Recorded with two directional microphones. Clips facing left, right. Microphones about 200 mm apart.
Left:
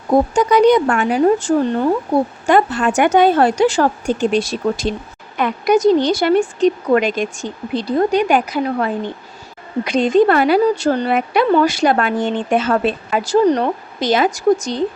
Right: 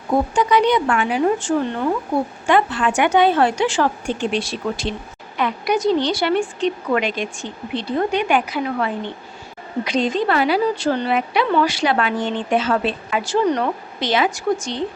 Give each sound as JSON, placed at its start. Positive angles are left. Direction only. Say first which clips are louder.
{"t": 0.1, "sound": "a woman's voice", "louder": "left 4 dB", "side_deg": 40}